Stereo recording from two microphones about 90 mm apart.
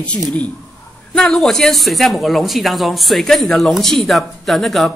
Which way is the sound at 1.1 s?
5° left (ahead or behind).